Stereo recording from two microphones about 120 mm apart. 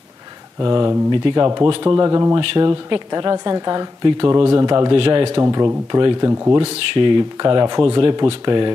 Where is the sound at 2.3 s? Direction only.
45° right (ahead or behind).